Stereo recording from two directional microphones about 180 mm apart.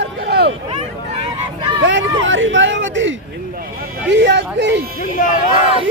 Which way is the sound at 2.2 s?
90° right.